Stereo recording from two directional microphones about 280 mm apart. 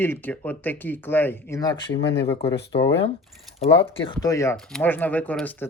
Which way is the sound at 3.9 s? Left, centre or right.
Centre.